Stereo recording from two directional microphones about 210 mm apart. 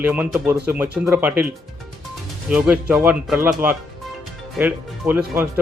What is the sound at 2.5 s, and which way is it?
Speech, 5° right (ahead or behind).